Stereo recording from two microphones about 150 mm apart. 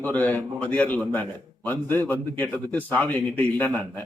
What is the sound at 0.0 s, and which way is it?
A man's voice, 10° left (ahead or behind).